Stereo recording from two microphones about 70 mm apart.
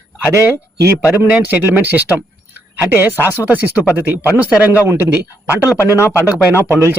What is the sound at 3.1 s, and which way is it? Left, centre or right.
Speech, left.